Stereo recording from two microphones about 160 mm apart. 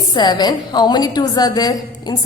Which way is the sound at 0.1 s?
25° left (ahead or behind).